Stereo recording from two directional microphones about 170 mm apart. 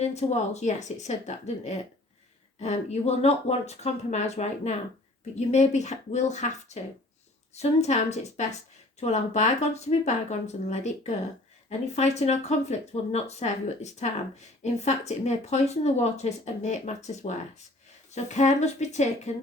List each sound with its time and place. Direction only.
0.0 s speech: 40° left (ahead or behind)
2.6 s speech: 40° left (ahead or behind)